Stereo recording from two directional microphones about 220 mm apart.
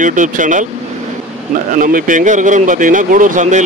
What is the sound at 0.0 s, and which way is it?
Speech, 35° right (ahead or behind).